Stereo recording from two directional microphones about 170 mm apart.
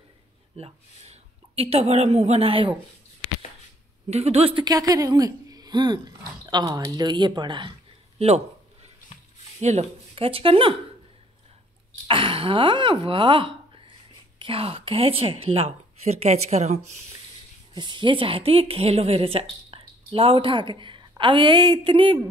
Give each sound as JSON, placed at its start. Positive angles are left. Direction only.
{"t": 0.6, "sound": "a woman's voice", "side_deg": -35}
{"t": 4.1, "sound": "a woman's voice", "side_deg": -40}
{"t": 4.6, "sound": "a woman's voice", "side_deg": -20}
{"t": 9.6, "sound": "a woman's voice", "side_deg": -40}
{"t": 12.1, "sound": "a woman's voice", "side_deg": -30}
{"t": 17.7, "sound": "a woman's voice", "side_deg": -25}